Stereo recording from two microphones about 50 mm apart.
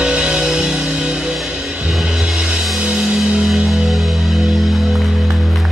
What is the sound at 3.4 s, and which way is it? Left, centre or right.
Music, centre.